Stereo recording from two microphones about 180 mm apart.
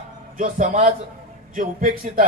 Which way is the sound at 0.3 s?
45° right (ahead or behind).